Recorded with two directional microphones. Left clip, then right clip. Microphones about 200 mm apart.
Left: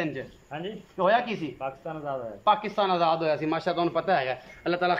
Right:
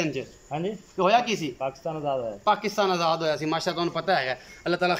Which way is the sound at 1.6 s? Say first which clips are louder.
Right 4 dB; 15° right (ahead or behind).